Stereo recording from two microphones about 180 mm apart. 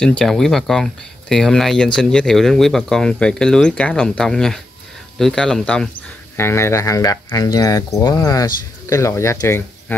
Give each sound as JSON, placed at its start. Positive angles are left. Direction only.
{"t": 0.2, "sound": "speech", "side_deg": 0}
{"t": 6.3, "sound": "speech", "side_deg": 15}